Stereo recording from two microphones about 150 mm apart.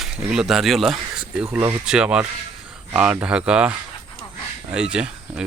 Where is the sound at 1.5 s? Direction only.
15° right (ahead or behind).